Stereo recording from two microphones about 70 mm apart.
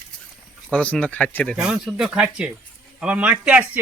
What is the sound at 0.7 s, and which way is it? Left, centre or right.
Speech, centre.